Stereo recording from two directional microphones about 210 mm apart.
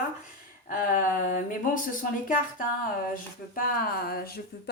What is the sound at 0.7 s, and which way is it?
Speech, 40° left (ahead or behind).